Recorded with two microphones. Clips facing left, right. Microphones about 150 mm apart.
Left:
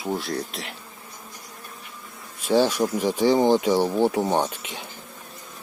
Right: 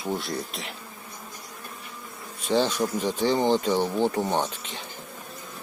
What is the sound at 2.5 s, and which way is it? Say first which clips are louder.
Speech: left 4 dB; 10° left (ahead or behind).